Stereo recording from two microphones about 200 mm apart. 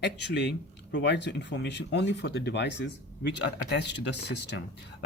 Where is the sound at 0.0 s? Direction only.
60° left (ahead or behind).